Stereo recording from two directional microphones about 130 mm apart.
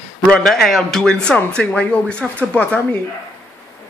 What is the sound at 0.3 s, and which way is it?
Speech, centre (ahead or behind).